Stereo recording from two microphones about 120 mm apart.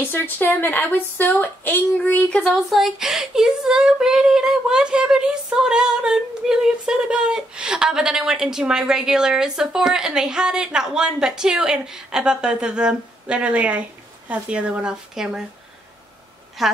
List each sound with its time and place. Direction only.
0.0 s speech: 15° left (ahead or behind)
2.5 s speech: centre (ahead or behind)
16.6 s speech: centre (ahead or behind)